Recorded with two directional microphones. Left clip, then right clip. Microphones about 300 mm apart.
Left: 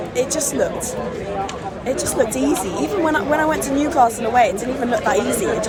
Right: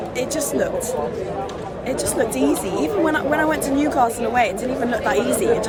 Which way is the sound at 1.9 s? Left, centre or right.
Centre.